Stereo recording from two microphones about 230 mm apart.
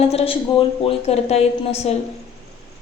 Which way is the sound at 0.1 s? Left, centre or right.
Left.